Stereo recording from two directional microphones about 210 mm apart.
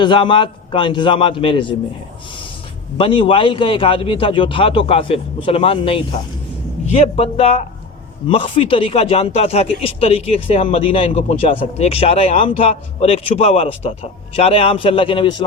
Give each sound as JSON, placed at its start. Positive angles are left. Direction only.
{"t": 0.0, "sound": "speech", "side_deg": 25}
{"t": 3.0, "sound": "a man's voice", "side_deg": 25}